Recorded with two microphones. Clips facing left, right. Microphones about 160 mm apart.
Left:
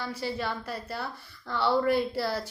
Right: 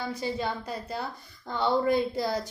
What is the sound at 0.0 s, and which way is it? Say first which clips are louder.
A woman's voice: right 2 dB; 15° right (ahead or behind).